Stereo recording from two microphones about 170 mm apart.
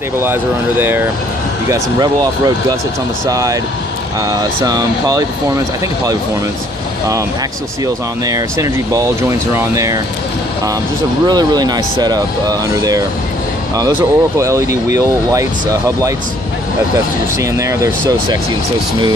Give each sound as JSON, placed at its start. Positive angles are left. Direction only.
{"t": 0.2, "sound": "speech", "side_deg": -15}
{"t": 7.8, "sound": "speech", "side_deg": -20}
{"t": 11.2, "sound": "speech", "side_deg": -25}
{"t": 17.4, "sound": "speech", "side_deg": -20}